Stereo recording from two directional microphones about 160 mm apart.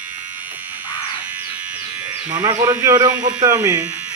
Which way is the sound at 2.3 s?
25° right (ahead or behind).